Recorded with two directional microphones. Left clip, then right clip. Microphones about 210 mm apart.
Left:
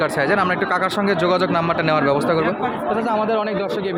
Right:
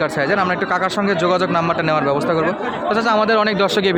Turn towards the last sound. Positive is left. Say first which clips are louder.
# right 6 dB
turn(degrees=-30)  # may be behind; listen again after turning